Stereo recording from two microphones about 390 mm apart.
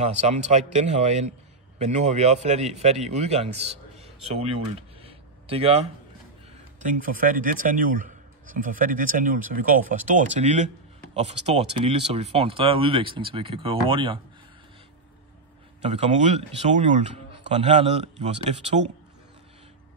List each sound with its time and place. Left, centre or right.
0.0 s speech: centre
4.4 s a sound: centre
6.8 s speech: centre
15.8 s speech: centre